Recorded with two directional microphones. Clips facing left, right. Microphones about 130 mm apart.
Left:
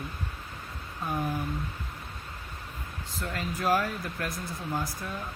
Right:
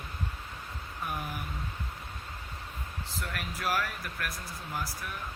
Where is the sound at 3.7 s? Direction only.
25° left (ahead or behind).